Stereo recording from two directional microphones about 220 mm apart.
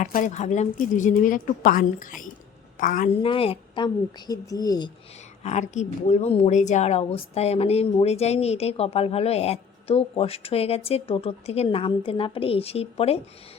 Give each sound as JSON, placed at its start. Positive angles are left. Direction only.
{"t": 0.0, "sound": "a woman's voice", "side_deg": 35}
{"t": 3.2, "sound": "a woman's voice", "side_deg": 25}
{"t": 5.4, "sound": "a woman's voice", "side_deg": 30}